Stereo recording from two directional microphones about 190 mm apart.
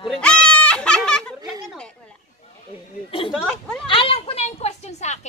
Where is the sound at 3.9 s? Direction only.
30° left (ahead or behind).